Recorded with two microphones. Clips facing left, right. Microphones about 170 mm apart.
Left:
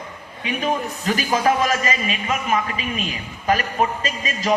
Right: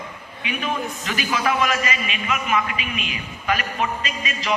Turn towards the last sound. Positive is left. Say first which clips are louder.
# left 4 dB
turn(degrees=45)  # may be behind; listen again after turning